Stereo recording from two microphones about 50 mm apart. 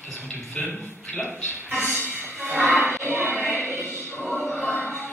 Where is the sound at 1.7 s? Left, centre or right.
Left.